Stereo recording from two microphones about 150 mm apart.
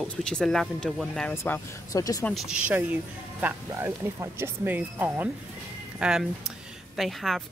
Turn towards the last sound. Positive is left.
turn(degrees=0)  # may be behind; listen again after turning